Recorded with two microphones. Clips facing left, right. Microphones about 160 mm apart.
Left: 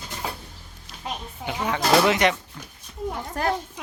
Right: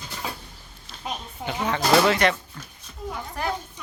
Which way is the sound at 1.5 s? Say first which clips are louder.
Even; 10° left (ahead or behind).